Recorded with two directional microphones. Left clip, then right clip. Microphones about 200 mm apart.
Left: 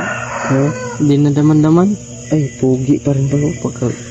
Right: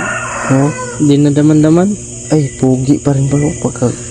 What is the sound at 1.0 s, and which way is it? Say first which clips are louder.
Cricket: right 3 dB; 20° right (ahead or behind).